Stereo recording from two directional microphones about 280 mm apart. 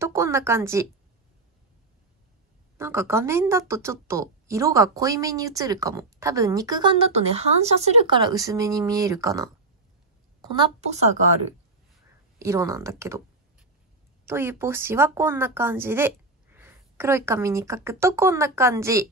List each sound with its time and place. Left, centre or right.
0.0 s a woman's voice: centre
2.8 s a woman's voice: centre
10.5 s a woman's voice: centre
12.4 s a woman's voice: centre